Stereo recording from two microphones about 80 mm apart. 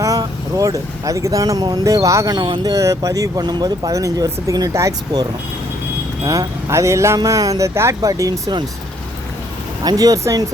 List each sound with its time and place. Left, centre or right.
0.0 s speech: right
2.3 s speech: right
2.7 s speech: right
6.2 s speech: right
7.2 s speech: right
9.8 s speech: right